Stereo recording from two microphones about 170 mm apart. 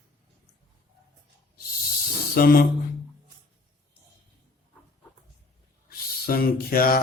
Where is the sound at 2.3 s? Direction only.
60° left (ahead or behind).